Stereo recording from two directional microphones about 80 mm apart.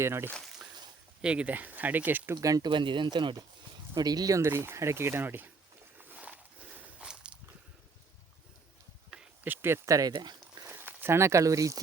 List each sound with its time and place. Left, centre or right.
0.0 s speech: right
1.2 s speech: centre
2.4 s speech: right
2.6 s speech: right
3.9 s speech: right
4.4 s speech: right
6.0 s a sound: centre
9.0 s a sound: centre
9.4 s speech: right
10.1 s a sound: right
10.7 s speech: right